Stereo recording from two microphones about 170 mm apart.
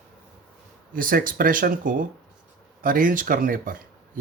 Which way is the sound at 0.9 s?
55° right (ahead or behind).